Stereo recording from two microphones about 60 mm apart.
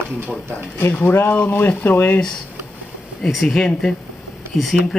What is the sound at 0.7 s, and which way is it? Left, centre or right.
Speech, left.